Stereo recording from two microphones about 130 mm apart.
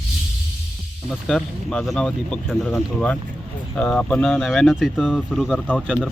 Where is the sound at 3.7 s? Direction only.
10° left (ahead or behind).